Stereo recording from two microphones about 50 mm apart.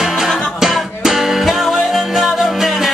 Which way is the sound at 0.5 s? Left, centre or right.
Centre.